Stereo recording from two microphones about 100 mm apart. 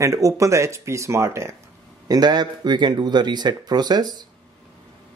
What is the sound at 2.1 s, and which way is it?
Speech, 45° right (ahead or behind).